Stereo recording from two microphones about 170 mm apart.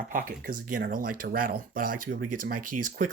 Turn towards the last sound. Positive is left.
turn(degrees=-50)  # may be behind; listen again after turning